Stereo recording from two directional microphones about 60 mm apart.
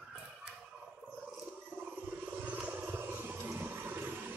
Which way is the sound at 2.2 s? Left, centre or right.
Right.